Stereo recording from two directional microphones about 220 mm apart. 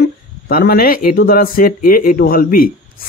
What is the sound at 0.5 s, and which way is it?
Speech, 40° left (ahead or behind).